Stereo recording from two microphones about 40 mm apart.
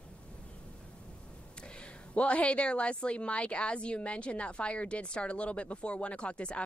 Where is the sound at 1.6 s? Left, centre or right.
Left.